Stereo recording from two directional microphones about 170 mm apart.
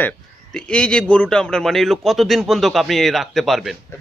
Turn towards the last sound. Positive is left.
turn(degrees=0)  # may be behind; listen again after turning